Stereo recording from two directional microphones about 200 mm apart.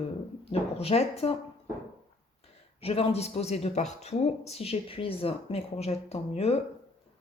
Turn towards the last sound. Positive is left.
turn(degrees=30)  # may be behind; listen again after turning